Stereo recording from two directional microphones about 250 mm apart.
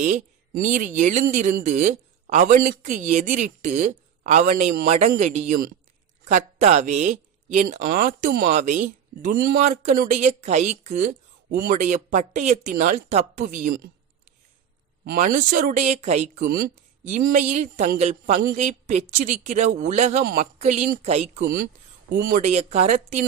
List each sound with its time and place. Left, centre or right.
0.0 s speech: right
15.0 s speech: right